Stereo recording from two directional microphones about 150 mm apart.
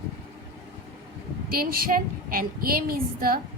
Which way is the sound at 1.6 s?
75° right (ahead or behind).